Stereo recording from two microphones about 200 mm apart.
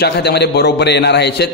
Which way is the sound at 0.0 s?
55° left (ahead or behind).